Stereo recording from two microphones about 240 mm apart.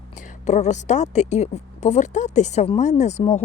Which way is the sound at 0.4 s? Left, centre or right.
Left.